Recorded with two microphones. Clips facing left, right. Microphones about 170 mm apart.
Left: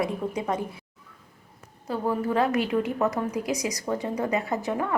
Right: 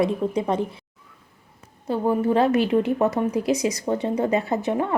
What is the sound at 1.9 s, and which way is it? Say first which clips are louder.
A woman's voice: right 5 dB; 25° right (ahead or behind).